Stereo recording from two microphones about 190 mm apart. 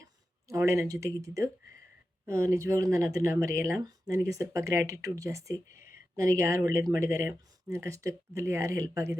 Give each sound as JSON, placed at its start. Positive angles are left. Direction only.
{"t": 0.0, "sound": "speech", "side_deg": -15}